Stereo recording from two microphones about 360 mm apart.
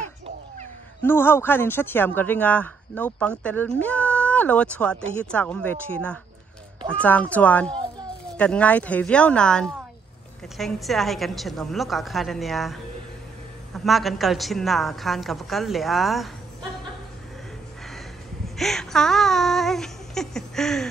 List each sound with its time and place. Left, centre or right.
1.0 s speech: centre
13.8 s speech: centre
18.6 s speech: centre